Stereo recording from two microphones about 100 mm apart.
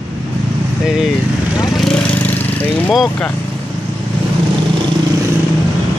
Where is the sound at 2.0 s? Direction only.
15° left (ahead or behind).